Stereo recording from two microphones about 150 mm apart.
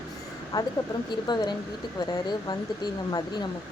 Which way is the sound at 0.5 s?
25° left (ahead or behind).